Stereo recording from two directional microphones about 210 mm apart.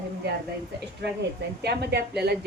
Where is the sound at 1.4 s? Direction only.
50° right (ahead or behind).